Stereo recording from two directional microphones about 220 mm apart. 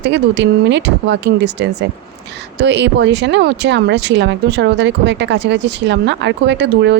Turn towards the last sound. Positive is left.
turn(degrees=-50)  # may be behind; listen again after turning